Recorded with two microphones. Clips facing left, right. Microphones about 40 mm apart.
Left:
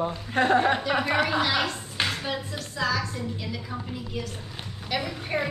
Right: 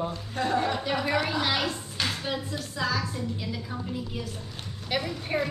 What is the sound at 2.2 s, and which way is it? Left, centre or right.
Speech, centre.